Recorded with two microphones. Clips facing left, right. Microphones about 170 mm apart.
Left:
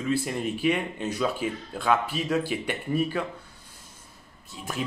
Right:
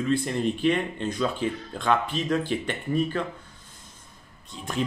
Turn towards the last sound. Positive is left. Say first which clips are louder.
# even
turn(degrees=60)  # may be behind; listen again after turning